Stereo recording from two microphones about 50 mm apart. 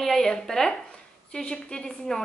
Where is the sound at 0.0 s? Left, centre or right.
Centre.